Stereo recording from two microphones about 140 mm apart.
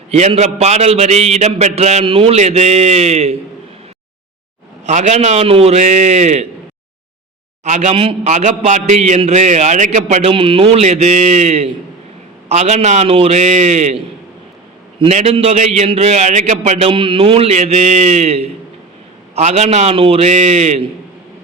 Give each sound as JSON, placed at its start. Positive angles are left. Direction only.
{"t": 0.1, "sound": "a man's voice", "side_deg": -50}
{"t": 4.9, "sound": "a man's voice", "side_deg": -55}
{"t": 7.6, "sound": "a man's voice", "side_deg": -55}
{"t": 7.9, "sound": "a man's voice", "side_deg": -40}
{"t": 8.3, "sound": "a man's voice", "side_deg": -60}
{"t": 16.9, "sound": "a man's voice", "side_deg": -40}